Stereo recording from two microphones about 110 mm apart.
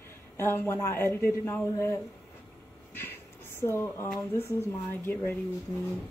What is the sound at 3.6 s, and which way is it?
Speech, 20° left (ahead or behind).